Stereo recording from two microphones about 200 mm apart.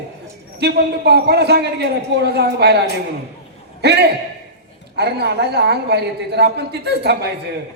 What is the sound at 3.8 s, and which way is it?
A man's voice, 55° right (ahead or behind).